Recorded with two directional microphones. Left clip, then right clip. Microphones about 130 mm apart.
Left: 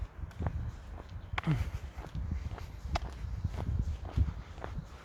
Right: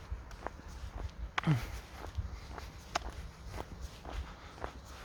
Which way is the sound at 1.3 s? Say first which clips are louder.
Right 2 dB; 10° right (ahead or behind).